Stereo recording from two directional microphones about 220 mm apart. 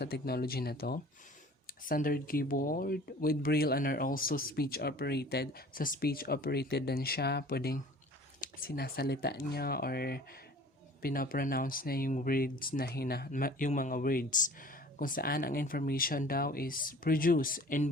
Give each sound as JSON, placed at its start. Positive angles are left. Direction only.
{"t": 0.0, "sound": "speech", "side_deg": 45}